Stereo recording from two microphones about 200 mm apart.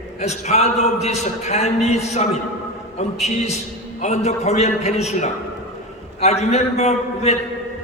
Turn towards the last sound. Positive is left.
turn(degrees=35)  # may be behind; listen again after turning